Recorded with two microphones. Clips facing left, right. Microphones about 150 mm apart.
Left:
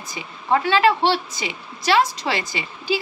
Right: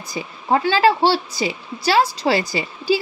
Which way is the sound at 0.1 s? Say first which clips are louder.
Right 2 dB; 30° right (ahead or behind).